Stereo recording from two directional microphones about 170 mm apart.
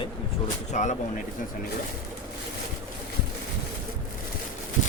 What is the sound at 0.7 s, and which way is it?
Speech, 45° left (ahead or behind).